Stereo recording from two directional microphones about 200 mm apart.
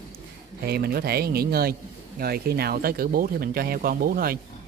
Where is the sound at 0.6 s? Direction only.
50° right (ahead or behind).